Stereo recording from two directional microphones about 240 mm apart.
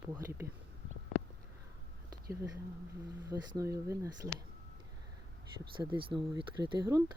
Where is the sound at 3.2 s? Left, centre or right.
Centre.